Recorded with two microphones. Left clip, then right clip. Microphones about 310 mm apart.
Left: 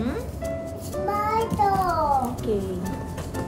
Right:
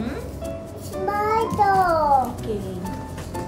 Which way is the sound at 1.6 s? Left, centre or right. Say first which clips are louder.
Right 3 dB; right.